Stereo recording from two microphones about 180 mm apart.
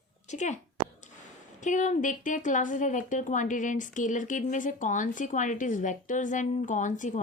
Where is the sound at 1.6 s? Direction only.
45° left (ahead or behind).